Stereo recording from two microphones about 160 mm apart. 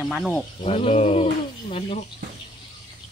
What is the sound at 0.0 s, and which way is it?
Speech, 5° left (ahead or behind).